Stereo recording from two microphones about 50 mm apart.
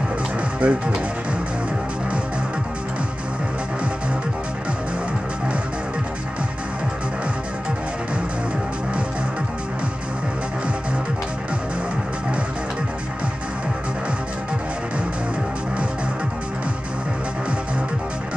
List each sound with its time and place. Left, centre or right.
0.6 s speech: right